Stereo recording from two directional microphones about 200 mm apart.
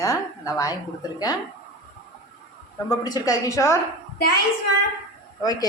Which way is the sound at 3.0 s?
20° left (ahead or behind).